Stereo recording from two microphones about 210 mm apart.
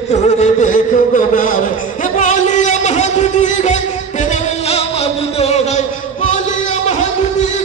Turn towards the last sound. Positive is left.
turn(degrees=35)  # may be behind; listen again after turning